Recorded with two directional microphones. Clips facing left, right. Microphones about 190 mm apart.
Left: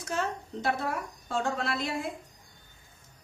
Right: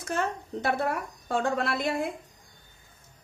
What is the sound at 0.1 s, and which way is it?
A woman's voice, 55° right (ahead or behind).